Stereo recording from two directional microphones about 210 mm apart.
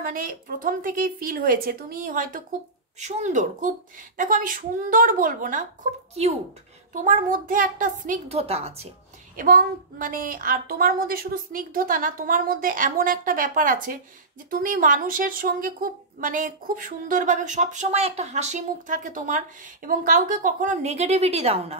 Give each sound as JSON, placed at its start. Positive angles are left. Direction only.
{"t": 0.0, "sound": "a woman's voice", "side_deg": -40}
{"t": 6.9, "sound": "a woman's voice", "side_deg": -40}
{"t": 9.4, "sound": "a woman's voice", "side_deg": -40}